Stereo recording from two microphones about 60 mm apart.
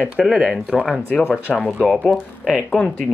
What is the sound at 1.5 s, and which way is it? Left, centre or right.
Speech, centre.